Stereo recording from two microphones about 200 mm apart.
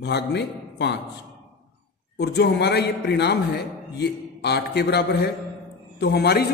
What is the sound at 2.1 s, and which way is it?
A man's voice, 55° left (ahead or behind).